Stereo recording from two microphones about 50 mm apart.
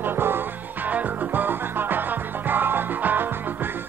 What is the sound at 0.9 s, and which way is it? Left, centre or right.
Music, right.